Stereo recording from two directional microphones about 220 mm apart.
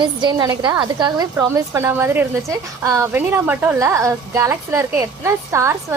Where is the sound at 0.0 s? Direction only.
20° right (ahead or behind).